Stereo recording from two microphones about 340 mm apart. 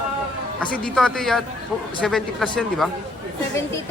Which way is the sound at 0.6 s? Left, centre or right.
Centre.